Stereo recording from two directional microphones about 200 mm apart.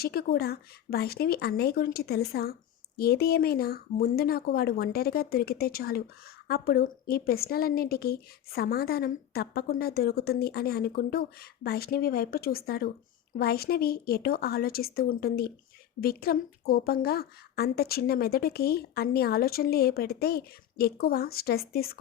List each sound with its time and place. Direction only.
0.0 s speech: 50° left (ahead or behind)